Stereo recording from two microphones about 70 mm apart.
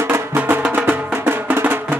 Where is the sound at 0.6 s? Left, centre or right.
Right.